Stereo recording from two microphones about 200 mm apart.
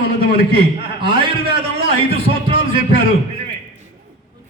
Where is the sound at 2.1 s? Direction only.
30° right (ahead or behind).